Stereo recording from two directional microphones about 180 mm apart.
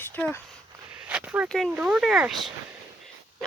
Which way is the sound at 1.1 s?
5° right (ahead or behind).